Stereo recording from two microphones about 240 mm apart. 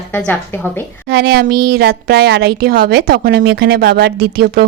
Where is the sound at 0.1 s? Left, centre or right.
Centre.